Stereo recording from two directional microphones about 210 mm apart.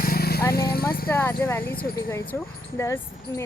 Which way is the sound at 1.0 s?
10° left (ahead or behind).